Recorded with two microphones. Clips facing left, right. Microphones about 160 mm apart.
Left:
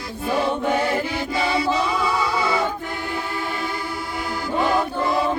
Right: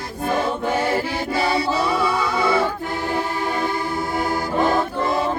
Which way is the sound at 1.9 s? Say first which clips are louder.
Right 1 dB; 55° right (ahead or behind).